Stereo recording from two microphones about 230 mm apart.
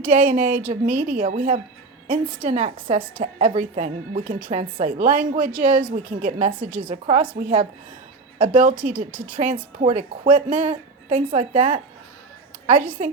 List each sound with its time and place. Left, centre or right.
0.0 s a woman's voice: right
13.0 s a woman's voice: right